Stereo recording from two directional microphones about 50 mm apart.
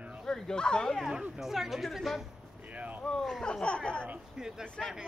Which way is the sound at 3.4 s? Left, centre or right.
Centre.